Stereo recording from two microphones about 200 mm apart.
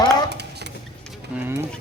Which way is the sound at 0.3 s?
55° right (ahead or behind).